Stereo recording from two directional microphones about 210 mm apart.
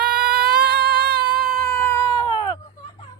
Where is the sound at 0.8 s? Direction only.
50° right (ahead or behind).